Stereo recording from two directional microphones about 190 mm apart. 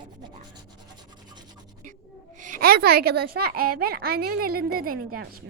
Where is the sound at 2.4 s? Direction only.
45° right (ahead or behind).